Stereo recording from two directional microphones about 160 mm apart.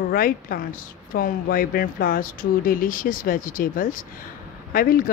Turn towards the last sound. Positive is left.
turn(degrees=65)  # may be behind; listen again after turning